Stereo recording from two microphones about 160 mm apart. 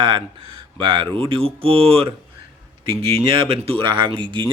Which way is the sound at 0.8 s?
30° right (ahead or behind).